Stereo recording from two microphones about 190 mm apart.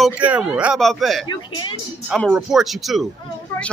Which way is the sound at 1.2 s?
25° left (ahead or behind).